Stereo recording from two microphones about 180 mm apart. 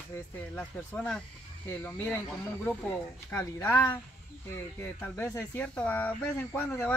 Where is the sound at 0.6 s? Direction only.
5° left (ahead or behind).